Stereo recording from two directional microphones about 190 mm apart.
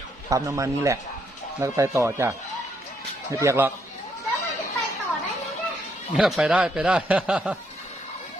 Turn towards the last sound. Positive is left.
turn(degrees=-5)  # may be behind; listen again after turning